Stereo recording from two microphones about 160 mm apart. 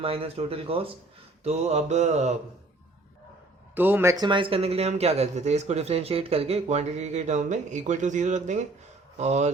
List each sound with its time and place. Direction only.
0.0 s speech: 35° right (ahead or behind)
1.5 s mantra: 45° right (ahead or behind)
3.8 s speech: 10° right (ahead or behind); by 8.5 s 50° right (ahead or behind)
9.1 s mantra: 45° right (ahead or behind)